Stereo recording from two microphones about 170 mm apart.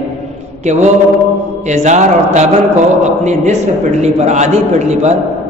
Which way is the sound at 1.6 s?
45° right (ahead or behind).